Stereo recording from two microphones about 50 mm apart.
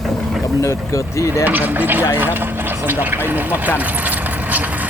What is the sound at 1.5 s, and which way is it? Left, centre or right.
Speech, right.